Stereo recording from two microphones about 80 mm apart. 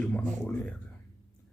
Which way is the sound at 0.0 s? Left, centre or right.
Centre.